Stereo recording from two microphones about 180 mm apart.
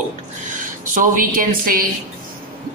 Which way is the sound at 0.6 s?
50° right (ahead or behind).